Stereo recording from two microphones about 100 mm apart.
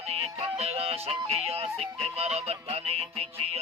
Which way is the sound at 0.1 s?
90° right.